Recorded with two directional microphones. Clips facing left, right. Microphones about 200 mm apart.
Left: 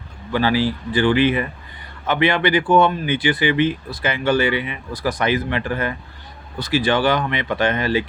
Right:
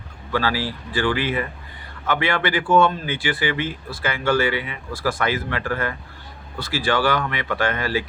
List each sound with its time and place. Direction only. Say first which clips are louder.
0.3 s speech: left 5 dB; 20° left (ahead or behind)